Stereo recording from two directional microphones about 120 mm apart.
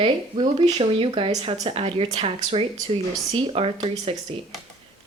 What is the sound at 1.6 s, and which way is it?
Speech, 55° right (ahead or behind).